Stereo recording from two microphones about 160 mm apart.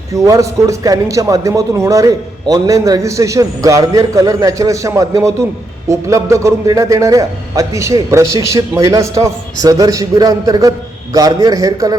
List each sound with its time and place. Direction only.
0.1 s a man's voice: 20° right (ahead or behind)